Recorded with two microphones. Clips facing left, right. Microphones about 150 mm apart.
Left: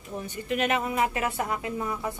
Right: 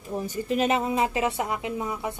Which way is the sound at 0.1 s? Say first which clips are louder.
Right 4 dB; 35° right (ahead or behind).